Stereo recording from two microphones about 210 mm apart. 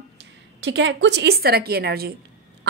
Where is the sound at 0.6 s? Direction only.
60° right (ahead or behind).